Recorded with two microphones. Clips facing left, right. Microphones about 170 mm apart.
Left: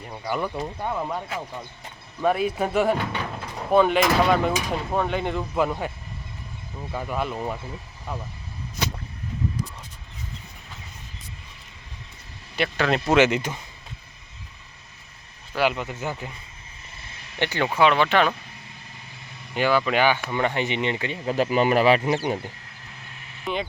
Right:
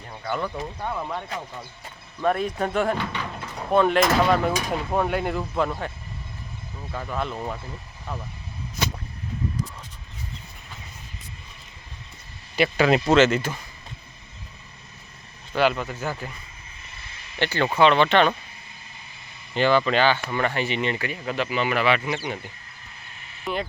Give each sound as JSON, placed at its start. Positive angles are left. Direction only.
{"t": 0.1, "sound": "speech", "side_deg": 10}
{"t": 5.5, "sound": "speech", "side_deg": 10}
{"t": 6.9, "sound": "speech", "side_deg": 10}
{"t": 12.5, "sound": "speech", "side_deg": -5}
{"t": 13.1, "sound": "speech", "side_deg": 15}
{"t": 15.5, "sound": "speech", "side_deg": 15}
{"t": 17.4, "sound": "speech", "side_deg": 15}
{"t": 17.7, "sound": "speech", "side_deg": 5}
{"t": 19.5, "sound": "speech", "side_deg": 10}
{"t": 21.3, "sound": "speech", "side_deg": 40}
{"t": 23.5, "sound": "speech", "side_deg": 0}